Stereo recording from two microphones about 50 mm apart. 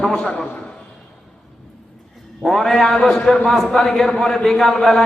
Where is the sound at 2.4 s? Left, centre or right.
Centre.